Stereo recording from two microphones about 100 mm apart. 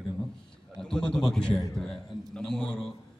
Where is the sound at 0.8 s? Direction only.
5° left (ahead or behind).